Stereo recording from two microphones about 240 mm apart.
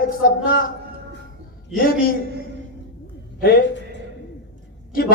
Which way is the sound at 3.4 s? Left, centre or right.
Left.